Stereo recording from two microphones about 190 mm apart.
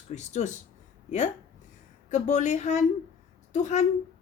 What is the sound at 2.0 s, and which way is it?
A woman's voice, 40° left (ahead or behind).